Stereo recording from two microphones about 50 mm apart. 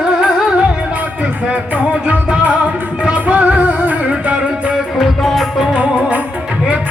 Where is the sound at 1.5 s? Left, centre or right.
Right.